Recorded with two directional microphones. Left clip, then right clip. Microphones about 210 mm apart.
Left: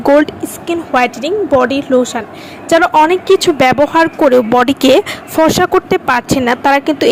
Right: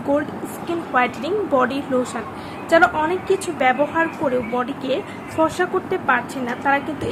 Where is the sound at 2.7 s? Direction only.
40° left (ahead or behind).